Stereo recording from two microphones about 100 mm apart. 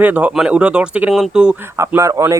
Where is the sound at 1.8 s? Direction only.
30° right (ahead or behind).